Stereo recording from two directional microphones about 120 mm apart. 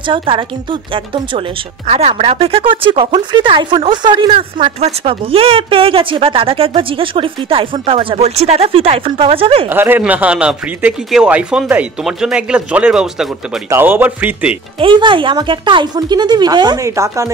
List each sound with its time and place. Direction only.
0.0 s speech: 45° right (ahead or behind)
1.9 s speech: 60° right (ahead or behind)
9.7 s speech: 15° right (ahead or behind)
13.7 s speech: 20° right (ahead or behind)
14.8 s speech: 45° right (ahead or behind); by 17.3 s 25° right (ahead or behind)